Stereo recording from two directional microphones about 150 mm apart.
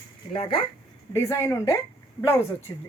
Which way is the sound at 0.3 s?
35° left (ahead or behind).